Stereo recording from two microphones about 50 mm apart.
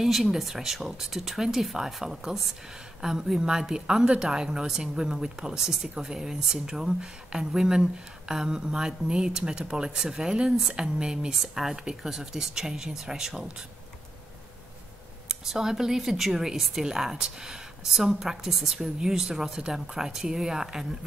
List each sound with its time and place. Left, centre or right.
0.0 s a woman's voice: centre
15.2 s a woman's voice: centre